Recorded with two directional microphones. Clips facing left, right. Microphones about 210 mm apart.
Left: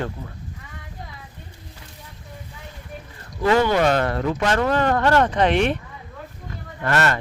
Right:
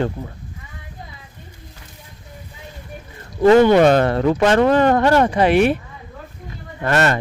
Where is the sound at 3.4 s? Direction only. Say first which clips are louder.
Right 8 dB; 40° right (ahead or behind).